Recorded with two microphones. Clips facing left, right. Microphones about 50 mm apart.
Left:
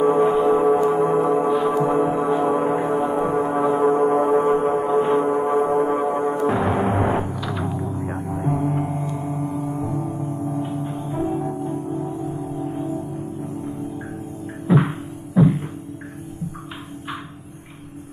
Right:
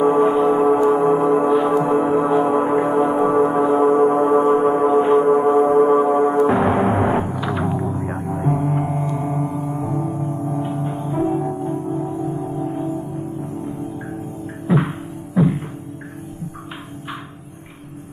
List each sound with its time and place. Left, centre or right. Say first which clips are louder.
0.0 s gong: right 2 dB; centre
0.9 s music: right 3 dB; centre
9.5 s gong: right 2 dB; centre; by 11.1 s right
11.1 s music: right 4 dB; centre
14.7 s music: left 1 dB; centre